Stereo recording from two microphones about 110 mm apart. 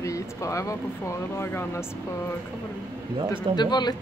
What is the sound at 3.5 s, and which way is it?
Speech, 40° left (ahead or behind).